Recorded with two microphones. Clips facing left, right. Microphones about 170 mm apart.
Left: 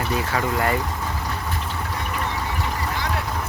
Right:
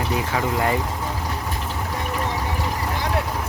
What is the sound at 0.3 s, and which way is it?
Speech, 15° right (ahead or behind).